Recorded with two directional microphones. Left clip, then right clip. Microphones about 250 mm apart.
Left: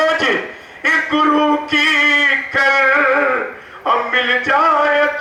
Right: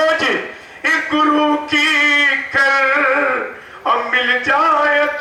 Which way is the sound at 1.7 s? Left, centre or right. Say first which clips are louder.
Even; centre.